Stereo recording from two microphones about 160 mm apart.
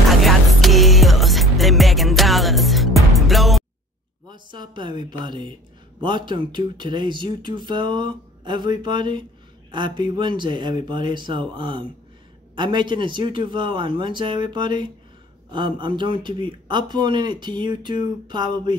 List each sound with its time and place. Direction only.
0.1 s music: centre (ahead or behind)
4.3 s a woman's voice: 30° right (ahead or behind)